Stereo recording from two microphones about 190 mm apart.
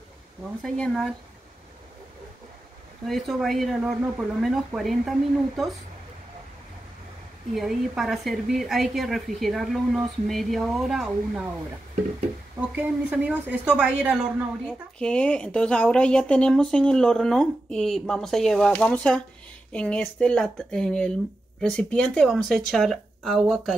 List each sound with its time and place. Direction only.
0.6 s speech: centre (ahead or behind)
3.1 s speech: centre (ahead or behind)
7.5 s speech: centre (ahead or behind)
12.5 s a woman's voice: 5° right (ahead or behind)
14.7 s speech: 5° left (ahead or behind)